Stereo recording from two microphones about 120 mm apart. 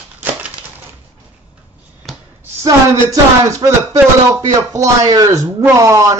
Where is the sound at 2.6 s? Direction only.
30° right (ahead or behind).